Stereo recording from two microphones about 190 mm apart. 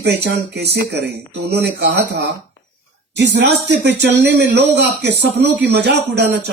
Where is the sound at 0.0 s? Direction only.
60° right (ahead or behind).